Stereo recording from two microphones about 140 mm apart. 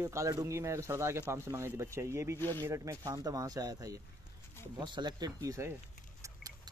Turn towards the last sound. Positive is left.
turn(degrees=-25)  # may be behind; listen again after turning